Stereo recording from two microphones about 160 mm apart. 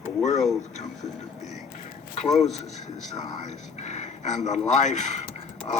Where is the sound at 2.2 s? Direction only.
45° left (ahead or behind).